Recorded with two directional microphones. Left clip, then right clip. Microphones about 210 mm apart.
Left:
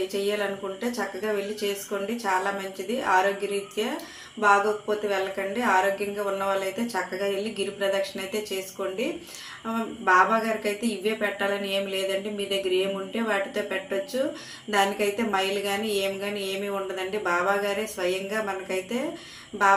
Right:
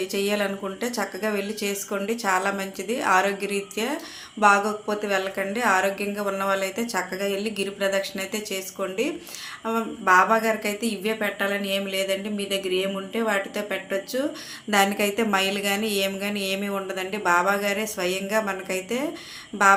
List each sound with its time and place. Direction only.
0.1 s speech: 40° right (ahead or behind)
4.4 s speech: 40° right (ahead or behind)